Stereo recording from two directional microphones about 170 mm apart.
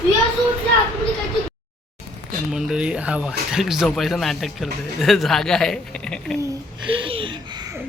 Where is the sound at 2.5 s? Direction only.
5° right (ahead or behind).